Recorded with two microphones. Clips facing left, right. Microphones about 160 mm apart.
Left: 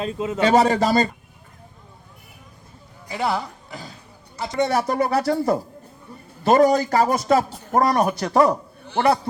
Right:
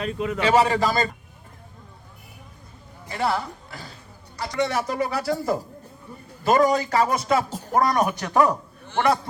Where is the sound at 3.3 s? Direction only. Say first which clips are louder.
Left 1 dB; 20° left (ahead or behind).